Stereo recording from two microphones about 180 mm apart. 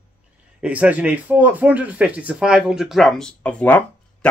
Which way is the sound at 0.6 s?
5° right (ahead or behind).